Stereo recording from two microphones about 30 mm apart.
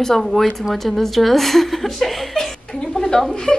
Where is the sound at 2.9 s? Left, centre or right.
Centre.